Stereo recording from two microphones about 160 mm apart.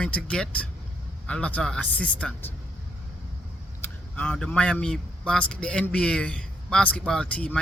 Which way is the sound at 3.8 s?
10° left (ahead or behind).